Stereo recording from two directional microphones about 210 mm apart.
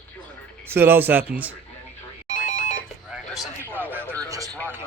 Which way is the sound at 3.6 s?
10° right (ahead or behind).